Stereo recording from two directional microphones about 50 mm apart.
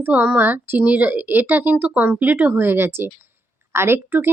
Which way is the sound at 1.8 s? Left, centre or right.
Right.